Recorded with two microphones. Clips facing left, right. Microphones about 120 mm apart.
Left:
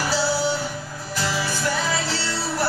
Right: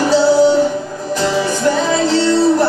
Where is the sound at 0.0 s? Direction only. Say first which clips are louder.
Right 12 dB; 20° right (ahead or behind).